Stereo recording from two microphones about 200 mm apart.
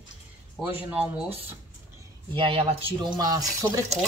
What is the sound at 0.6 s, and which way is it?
Speech, 10° right (ahead or behind).